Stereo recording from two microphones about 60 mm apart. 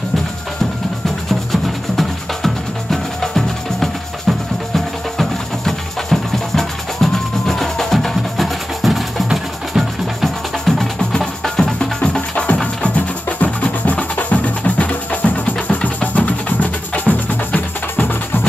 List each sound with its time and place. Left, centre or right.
1.5 s music: centre; by 18.5 s left